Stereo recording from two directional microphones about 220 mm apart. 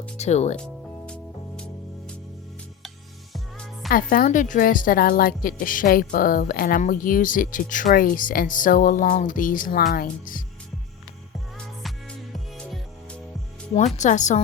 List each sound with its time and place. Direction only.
0.2 s a woman's voice: 30° left (ahead or behind)
1.0 s music: 5° left (ahead or behind)
3.8 s a woman's voice: 40° left (ahead or behind)
11.5 s music: centre (ahead or behind)
13.7 s a woman's voice: 30° left (ahead or behind)